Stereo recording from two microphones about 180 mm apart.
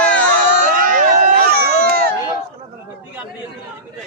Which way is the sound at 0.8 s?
45° right (ahead or behind).